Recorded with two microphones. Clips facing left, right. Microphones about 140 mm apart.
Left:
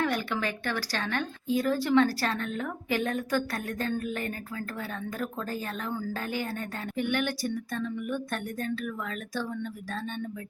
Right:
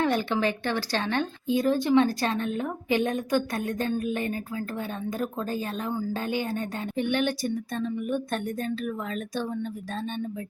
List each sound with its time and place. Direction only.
0.0 s speech: 25° right (ahead or behind)